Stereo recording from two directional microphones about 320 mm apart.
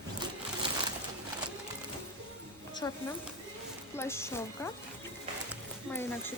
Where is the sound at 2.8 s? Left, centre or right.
Centre.